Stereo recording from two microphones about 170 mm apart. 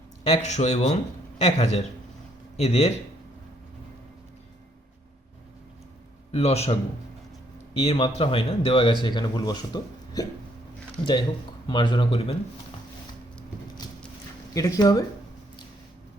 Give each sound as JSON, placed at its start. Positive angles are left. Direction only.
{"t": 0.3, "sound": "speech", "side_deg": 40}
{"t": 6.3, "sound": "speech", "side_deg": 35}
{"t": 7.8, "sound": "speech", "side_deg": 35}
{"t": 14.5, "sound": "speech", "side_deg": 20}